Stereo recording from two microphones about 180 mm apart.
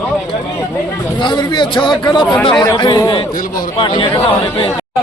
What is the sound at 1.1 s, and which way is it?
A man's voice, 25° left (ahead or behind).